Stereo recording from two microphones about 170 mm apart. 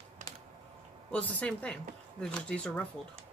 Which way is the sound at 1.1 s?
5° left (ahead or behind).